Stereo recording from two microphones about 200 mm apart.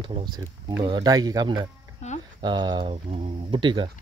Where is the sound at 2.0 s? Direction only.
35° left (ahead or behind).